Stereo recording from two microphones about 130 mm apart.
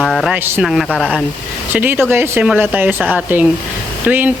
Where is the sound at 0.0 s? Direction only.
Centre (ahead or behind).